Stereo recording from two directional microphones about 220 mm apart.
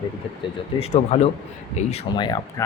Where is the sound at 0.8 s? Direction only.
30° left (ahead or behind).